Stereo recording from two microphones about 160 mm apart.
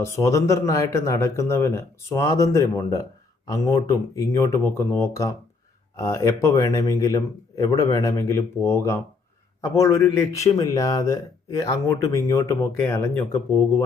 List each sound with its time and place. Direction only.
0.0 s speech: 20° left (ahead or behind)